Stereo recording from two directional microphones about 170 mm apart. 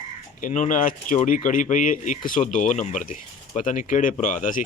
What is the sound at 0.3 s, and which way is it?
Speech, 50° left (ahead or behind).